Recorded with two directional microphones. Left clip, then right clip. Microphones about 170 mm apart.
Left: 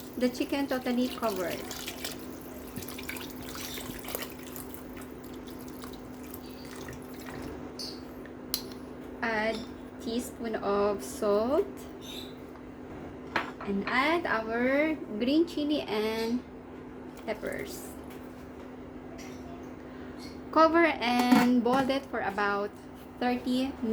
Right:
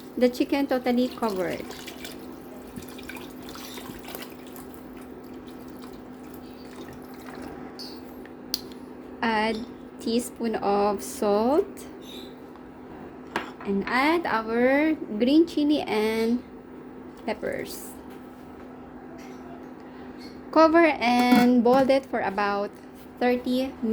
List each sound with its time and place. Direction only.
0.2 s a woman's voice: 45° right (ahead or behind)
9.2 s a sound: 50° right (ahead or behind)
10.0 s a woman's voice: 50° right (ahead or behind)
13.9 s a woman's voice: 60° right (ahead or behind)
20.5 s speech: 35° right (ahead or behind)